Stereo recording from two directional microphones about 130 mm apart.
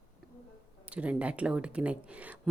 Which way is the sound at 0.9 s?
10° right (ahead or behind).